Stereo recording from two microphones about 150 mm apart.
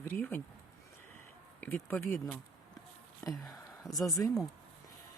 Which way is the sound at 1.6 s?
15° left (ahead or behind).